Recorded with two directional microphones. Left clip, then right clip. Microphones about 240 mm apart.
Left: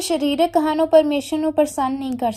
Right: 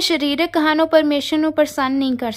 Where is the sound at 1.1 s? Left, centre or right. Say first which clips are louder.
Right 2 dB; centre.